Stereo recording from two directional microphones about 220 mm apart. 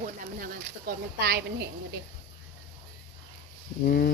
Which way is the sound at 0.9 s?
45° right (ahead or behind).